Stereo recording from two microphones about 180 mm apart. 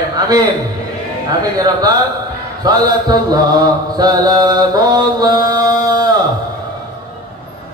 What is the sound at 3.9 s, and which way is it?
Mantra, 20° right (ahead or behind).